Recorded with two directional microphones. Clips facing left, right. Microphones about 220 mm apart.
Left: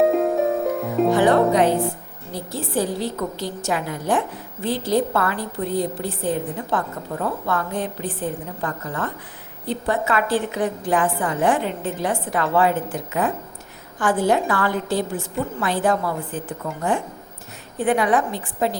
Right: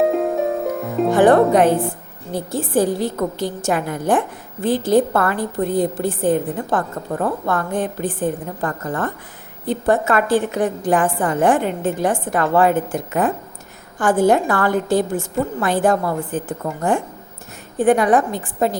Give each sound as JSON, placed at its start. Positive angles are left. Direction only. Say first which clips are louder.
{"t": 0.0, "sound": "harp", "louder": "even", "side_deg": 0}
{"t": 1.1, "sound": "a woman's voice", "louder": "right 5 dB", "side_deg": -50}
{"t": 17.7, "sound": "a woman's voice", "louder": "right 5 dB", "side_deg": -45}